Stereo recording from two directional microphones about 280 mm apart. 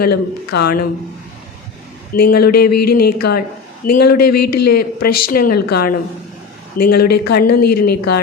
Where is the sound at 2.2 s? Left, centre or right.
Left.